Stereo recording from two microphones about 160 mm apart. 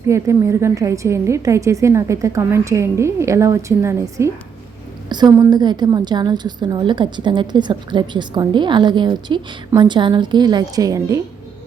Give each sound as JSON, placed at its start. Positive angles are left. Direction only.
{"t": 0.1, "sound": "a woman's voice", "side_deg": -20}